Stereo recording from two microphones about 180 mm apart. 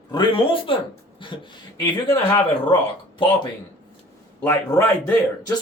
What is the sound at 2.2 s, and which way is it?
Speech, 15° left (ahead or behind).